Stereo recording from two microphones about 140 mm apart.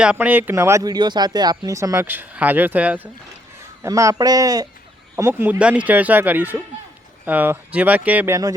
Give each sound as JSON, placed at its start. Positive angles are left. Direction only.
{"t": 0.0, "sound": "speech", "side_deg": -10}
{"t": 3.8, "sound": "speech", "side_deg": -25}